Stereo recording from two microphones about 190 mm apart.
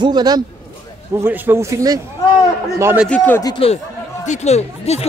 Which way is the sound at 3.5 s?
30° left (ahead or behind).